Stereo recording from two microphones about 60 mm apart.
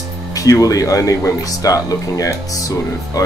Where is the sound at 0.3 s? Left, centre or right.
Left.